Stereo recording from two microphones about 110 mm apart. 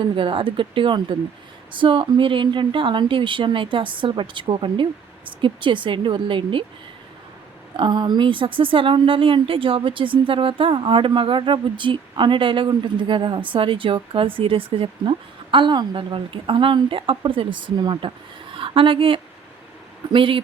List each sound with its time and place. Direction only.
0.2 s speech: 50° right (ahead or behind)
7.8 s speech: 45° right (ahead or behind)